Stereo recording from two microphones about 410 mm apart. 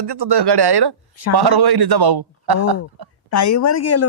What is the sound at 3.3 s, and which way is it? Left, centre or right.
Speech, left.